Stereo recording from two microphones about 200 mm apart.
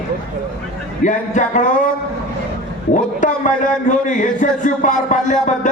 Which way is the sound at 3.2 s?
40° left (ahead or behind).